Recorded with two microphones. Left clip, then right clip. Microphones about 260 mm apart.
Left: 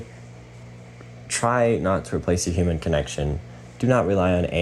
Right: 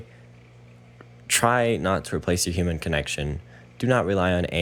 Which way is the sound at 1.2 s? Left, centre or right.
Right.